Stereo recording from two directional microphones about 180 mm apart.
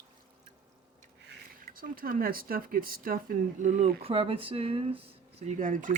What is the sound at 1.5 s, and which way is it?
Speech, 50° right (ahead or behind).